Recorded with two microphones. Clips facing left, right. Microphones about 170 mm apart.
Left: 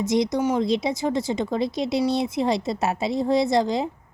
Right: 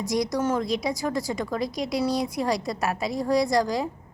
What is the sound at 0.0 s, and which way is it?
A woman's voice, 20° left (ahead or behind).